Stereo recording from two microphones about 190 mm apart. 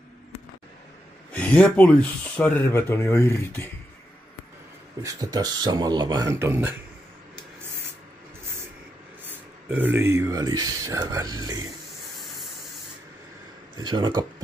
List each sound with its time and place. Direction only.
1.3 s speech: 5° left (ahead or behind)
5.0 s speech: 20° right (ahead or behind)
9.3 s speech: 10° right (ahead or behind)
13.7 s speech: 25° right (ahead or behind)